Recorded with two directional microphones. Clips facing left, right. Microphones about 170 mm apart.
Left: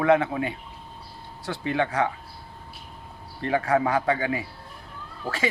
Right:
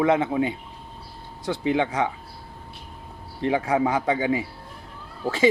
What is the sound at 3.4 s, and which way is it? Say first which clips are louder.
Speech: right 1 dB; 15° right (ahead or behind).